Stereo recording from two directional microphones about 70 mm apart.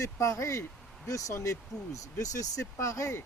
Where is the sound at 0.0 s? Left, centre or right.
Left.